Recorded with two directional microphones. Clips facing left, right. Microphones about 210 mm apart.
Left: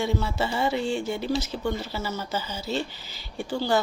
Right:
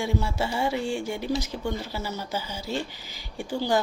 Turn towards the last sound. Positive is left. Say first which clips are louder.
# even
turn(degrees=-15)  # may be behind; listen again after turning